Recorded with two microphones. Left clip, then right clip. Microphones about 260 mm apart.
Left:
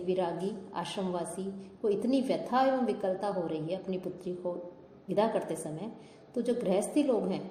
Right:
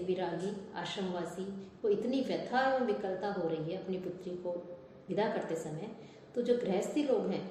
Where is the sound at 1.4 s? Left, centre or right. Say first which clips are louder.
Left 3 dB; left.